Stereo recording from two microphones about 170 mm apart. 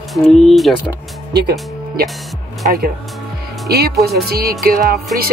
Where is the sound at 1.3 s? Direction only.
70° right (ahead or behind).